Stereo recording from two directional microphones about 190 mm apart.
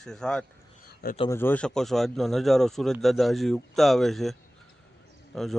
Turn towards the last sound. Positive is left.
turn(degrees=0)  # may be behind; listen again after turning